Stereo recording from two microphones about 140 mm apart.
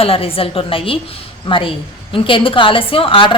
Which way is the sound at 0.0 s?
40° left (ahead or behind).